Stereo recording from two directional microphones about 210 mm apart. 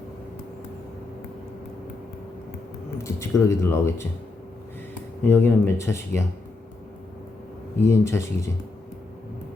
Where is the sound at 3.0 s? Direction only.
15° left (ahead or behind).